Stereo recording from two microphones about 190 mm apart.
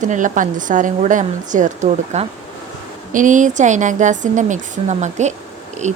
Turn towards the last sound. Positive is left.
turn(degrees=-40)  # may be behind; listen again after turning